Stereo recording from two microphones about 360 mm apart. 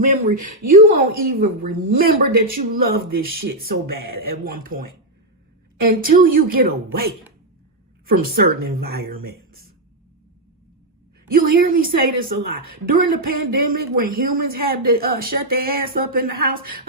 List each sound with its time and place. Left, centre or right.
0.0 s speech: right
11.3 s speech: right